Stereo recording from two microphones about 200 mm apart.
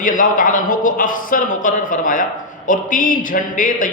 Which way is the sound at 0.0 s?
40° left (ahead or behind).